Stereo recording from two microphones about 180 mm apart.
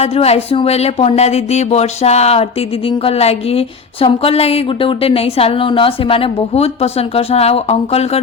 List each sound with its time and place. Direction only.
0.0 s speech: 35° left (ahead or behind)